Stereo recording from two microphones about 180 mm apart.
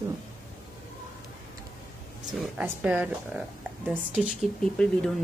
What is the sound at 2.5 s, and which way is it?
A woman's voice, 10° right (ahead or behind).